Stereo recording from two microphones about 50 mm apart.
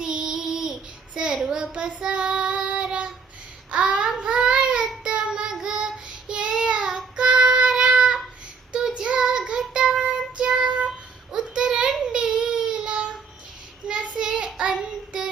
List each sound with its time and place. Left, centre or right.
0.0 s child singing: centre
9.7 s music: right
11.3 s child singing: centre